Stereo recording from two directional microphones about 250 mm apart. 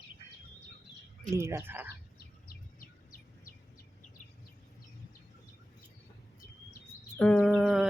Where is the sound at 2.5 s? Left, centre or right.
Left.